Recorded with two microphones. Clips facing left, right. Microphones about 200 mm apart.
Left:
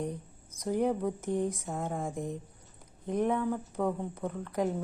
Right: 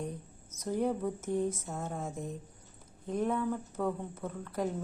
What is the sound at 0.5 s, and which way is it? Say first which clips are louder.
Speech: left 3 dB; 15° left (ahead or behind).